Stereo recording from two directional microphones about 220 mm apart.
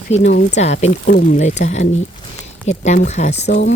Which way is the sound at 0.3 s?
30° left (ahead or behind).